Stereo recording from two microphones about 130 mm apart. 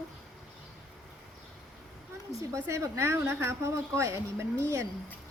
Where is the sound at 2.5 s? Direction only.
20° right (ahead or behind).